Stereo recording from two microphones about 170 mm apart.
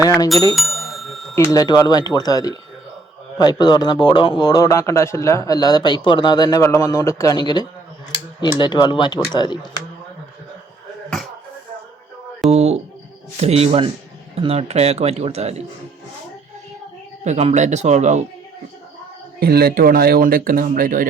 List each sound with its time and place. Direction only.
0.0 s speech: 20° left (ahead or behind)
0.5 s bicycle bell: centre (ahead or behind)
1.5 s speech: 20° left (ahead or behind)
12.5 s music: 35° right (ahead or behind)
13.3 s speech: 40° right (ahead or behind)
17.2 s speech: 40° right (ahead or behind)
19.4 s speech: 65° right (ahead or behind)